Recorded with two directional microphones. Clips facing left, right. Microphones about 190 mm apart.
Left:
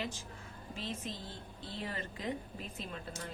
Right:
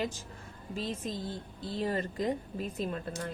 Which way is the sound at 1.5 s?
40° right (ahead or behind).